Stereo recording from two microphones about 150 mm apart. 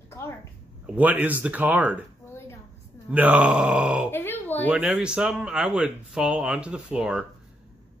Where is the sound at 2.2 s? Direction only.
15° left (ahead or behind).